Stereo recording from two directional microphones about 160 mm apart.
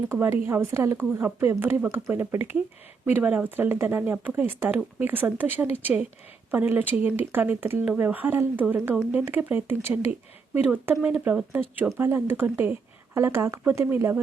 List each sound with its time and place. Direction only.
0.1 s speech: 15° right (ahead or behind)